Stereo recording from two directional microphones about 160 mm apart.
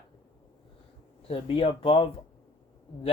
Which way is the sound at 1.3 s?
35° left (ahead or behind).